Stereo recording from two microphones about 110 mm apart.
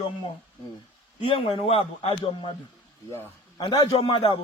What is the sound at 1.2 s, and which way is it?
A man's voice, 65° left (ahead or behind).